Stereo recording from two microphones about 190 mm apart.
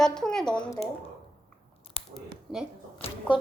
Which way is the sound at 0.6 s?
20° left (ahead or behind).